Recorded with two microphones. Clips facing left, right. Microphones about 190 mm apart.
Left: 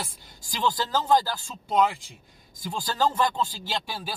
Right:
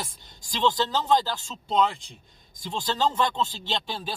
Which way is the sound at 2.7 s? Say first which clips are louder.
Right 2 dB; 20° right (ahead or behind).